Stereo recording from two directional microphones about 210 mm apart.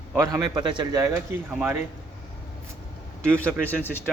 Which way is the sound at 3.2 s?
10° right (ahead or behind).